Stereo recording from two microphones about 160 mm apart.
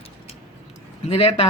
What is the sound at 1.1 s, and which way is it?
Speech, 40° left (ahead or behind).